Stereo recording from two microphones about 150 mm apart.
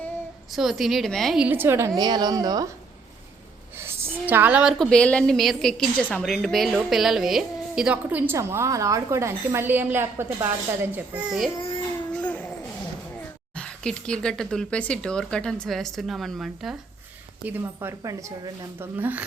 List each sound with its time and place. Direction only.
0.5 s speech: centre (ahead or behind)
1.5 s a woman's voice: 15° right (ahead or behind)
2.0 s speech: 30° right (ahead or behind)
3.8 s a sound: 15° right (ahead or behind)
4.8 s a woman's voice: 5° left (ahead or behind); by 11.3 s 10° right (ahead or behind)
12.1 s a sound: 10° left (ahead or behind)
13.6 s speech: 5° left (ahead or behind)
17.4 s a woman's voice: 15° right (ahead or behind)